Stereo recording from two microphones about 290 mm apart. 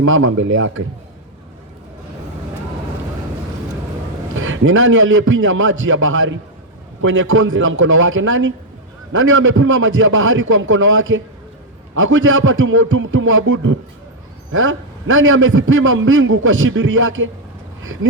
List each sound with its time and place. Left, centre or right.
0.0 s a man's voice: right
4.4 s a man's voice: right